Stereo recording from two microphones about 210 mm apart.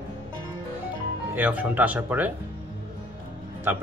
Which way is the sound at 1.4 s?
5° right (ahead or behind).